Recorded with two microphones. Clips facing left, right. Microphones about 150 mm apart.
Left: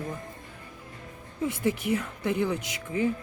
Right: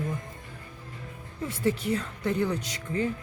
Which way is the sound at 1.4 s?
15° left (ahead or behind).